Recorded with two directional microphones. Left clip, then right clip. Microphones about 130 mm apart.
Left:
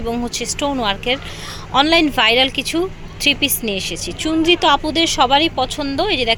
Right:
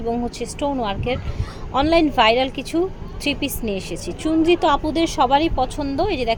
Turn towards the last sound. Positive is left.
turn(degrees=0)  # may be behind; listen again after turning